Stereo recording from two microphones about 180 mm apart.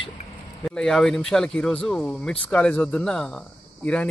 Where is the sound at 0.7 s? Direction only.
5° left (ahead or behind).